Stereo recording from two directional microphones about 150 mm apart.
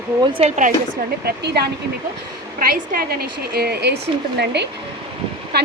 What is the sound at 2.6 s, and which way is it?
A woman's voice, 75° right (ahead or behind).